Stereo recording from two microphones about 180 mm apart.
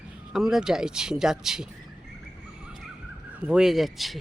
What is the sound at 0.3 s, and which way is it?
Speech, centre (ahead or behind).